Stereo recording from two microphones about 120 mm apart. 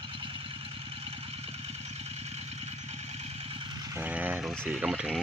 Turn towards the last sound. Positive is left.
turn(degrees=-5)  # may be behind; listen again after turning